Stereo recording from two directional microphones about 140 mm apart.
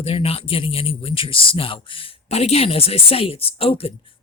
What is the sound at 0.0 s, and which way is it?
Speech, 45° left (ahead or behind).